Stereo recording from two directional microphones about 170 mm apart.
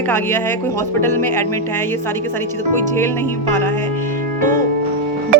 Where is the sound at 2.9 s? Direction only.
15° left (ahead or behind).